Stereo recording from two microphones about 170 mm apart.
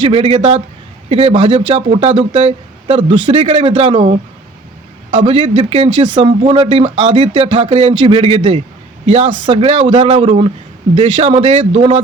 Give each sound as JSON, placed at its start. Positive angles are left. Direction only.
{"t": 0.0, "sound": "speech", "side_deg": -30}